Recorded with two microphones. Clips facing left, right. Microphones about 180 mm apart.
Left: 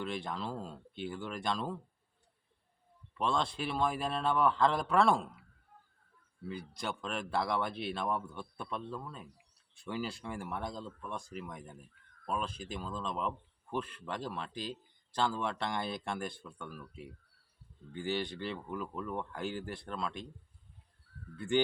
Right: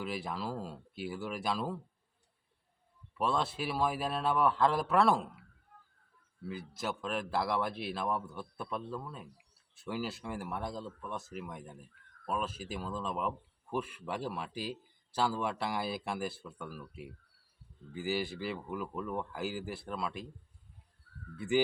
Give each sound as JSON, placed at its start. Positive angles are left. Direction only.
{"t": 0.0, "sound": "speech", "side_deg": -5}
{"t": 3.2, "sound": "speech", "side_deg": -5}
{"t": 6.4, "sound": "speech", "side_deg": -5}
{"t": 21.3, "sound": "speech", "side_deg": -5}